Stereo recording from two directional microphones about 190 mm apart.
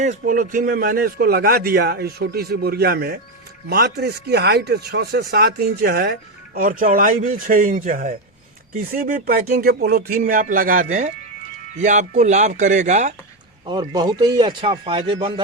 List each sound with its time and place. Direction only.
0.0 s speech: 40° right (ahead or behind)
13.7 s speech: 20° right (ahead or behind)